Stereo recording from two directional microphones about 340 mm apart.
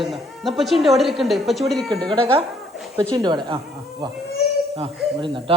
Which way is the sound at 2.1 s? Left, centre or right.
Centre.